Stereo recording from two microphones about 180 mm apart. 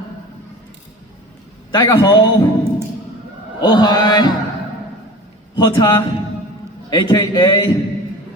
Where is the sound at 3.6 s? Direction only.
25° left (ahead or behind).